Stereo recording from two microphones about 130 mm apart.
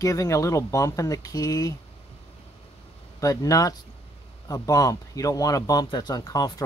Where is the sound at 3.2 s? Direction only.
25° left (ahead or behind).